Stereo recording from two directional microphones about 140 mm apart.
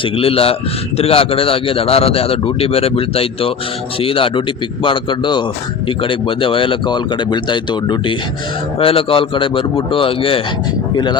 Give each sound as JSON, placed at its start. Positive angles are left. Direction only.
{"t": 0.2, "sound": "a man's voice", "side_deg": 45}